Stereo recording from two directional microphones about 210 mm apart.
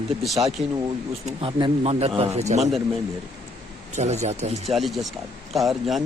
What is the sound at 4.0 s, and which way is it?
Speech, 30° right (ahead or behind).